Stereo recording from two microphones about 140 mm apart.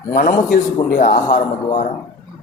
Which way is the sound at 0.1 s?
80° left.